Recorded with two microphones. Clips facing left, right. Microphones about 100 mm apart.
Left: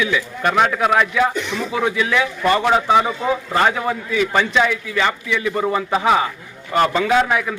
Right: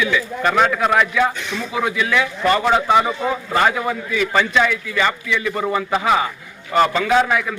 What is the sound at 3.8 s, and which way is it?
A man's voice, 25° left (ahead or behind).